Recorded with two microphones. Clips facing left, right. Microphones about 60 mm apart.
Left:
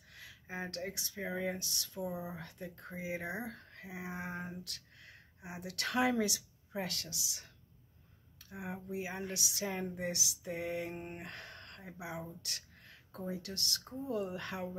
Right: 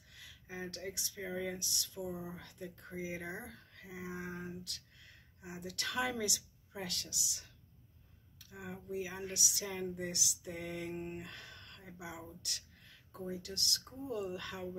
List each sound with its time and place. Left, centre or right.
0.1 s speech: left
3.4 s speech: left
3.8 s a sound: left
4.4 s a sound: left
5.7 s speech: left
8.5 s speech: left
10.9 s speech: left